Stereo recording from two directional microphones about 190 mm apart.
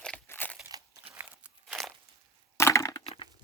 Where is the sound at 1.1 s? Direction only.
5° right (ahead or behind).